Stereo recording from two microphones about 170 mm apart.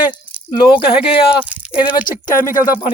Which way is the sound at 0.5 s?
30° left (ahead or behind).